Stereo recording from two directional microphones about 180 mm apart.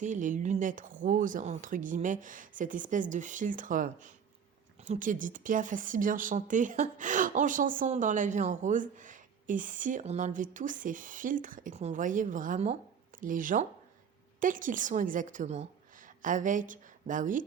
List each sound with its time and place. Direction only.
0.0 s speech: 45° right (ahead or behind)